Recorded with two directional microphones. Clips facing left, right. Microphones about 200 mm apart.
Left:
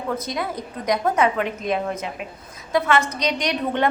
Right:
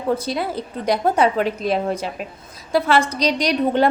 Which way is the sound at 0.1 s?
30° right (ahead or behind).